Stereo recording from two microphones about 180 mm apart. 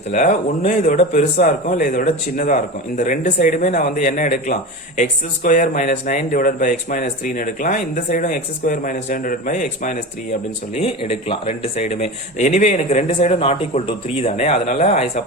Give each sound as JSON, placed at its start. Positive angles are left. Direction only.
{"t": 0.1, "sound": "speech", "side_deg": 45}
{"t": 10.8, "sound": "speech", "side_deg": 35}